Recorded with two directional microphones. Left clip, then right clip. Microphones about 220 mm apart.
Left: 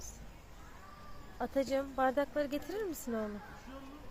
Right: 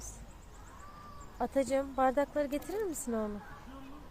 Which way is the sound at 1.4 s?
20° right (ahead or behind).